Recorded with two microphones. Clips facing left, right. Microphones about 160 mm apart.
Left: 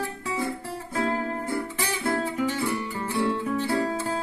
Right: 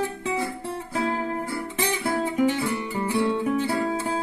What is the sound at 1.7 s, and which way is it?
Music, 15° right (ahead or behind).